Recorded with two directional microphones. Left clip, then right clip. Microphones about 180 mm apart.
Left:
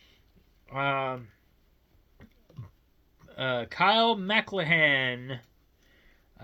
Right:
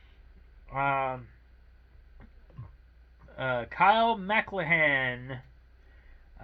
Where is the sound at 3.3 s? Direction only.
30° left (ahead or behind).